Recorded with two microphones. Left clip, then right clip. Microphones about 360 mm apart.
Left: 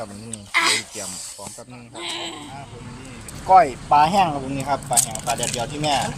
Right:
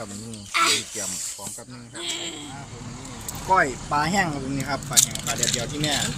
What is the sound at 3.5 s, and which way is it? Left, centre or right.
Speech, centre.